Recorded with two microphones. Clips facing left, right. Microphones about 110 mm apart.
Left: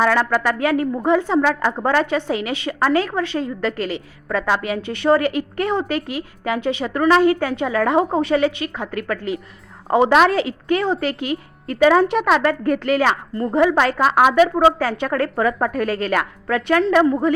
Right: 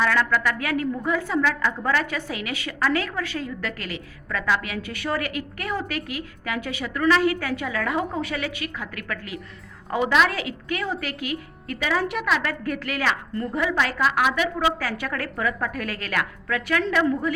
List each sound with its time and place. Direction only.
0.0 s a woman's voice: 35° left (ahead or behind)
2.0 s a woman's voice: 25° left (ahead or behind)
13.7 s a woman's voice: 50° left (ahead or behind)
14.6 s a woman's voice: 30° left (ahead or behind)